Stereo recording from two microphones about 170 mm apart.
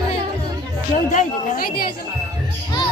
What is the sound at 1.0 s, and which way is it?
Chatter, 55° left (ahead or behind).